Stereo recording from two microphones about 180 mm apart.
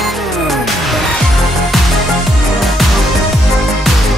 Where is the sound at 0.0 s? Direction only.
Centre (ahead or behind).